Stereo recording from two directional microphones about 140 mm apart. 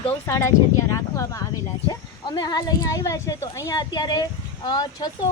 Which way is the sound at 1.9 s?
30° left (ahead or behind).